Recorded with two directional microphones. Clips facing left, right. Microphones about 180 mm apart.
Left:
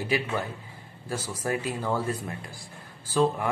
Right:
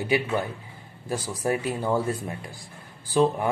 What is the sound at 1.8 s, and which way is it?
Speech, 25° right (ahead or behind).